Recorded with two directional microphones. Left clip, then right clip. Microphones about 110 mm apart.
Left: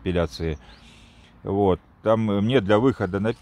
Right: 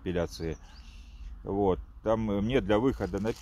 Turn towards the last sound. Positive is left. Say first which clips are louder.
# left 7 dB
turn(degrees=20)  # may be behind; listen again after turning